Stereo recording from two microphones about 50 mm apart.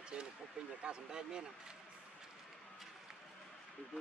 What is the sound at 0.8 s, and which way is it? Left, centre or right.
Speech, centre.